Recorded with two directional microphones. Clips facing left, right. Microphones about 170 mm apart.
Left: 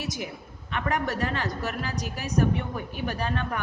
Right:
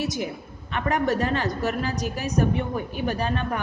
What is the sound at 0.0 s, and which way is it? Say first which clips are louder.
A woman's voice: right 6 dB; 25° right (ahead or behind).